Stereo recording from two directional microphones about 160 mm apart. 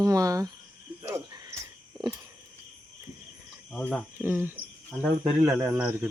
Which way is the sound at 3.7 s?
5° left (ahead or behind).